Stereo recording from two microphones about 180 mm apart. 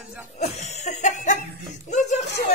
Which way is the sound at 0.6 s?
40° left (ahead or behind).